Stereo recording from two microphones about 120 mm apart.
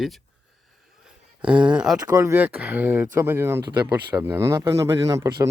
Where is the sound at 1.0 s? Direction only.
10° right (ahead or behind).